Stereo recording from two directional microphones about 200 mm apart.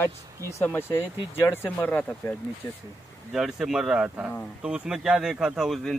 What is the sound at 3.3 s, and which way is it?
Speech, 5° right (ahead or behind).